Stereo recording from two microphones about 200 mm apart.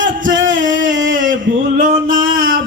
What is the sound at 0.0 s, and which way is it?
Singing, 70° right (ahead or behind).